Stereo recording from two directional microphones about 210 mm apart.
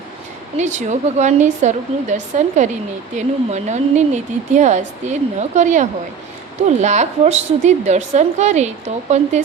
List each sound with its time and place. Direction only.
0.5 s a woman's voice: 35° right (ahead or behind)